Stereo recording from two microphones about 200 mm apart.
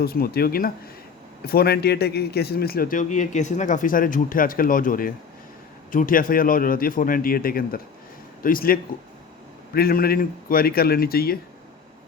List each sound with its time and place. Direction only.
0.0 s a man's voice: 50° left (ahead or behind)